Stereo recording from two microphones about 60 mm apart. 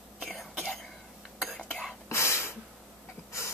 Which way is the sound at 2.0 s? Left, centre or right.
Left.